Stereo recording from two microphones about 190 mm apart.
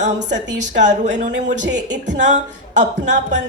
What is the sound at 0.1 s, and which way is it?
Speech, 70° right (ahead or behind).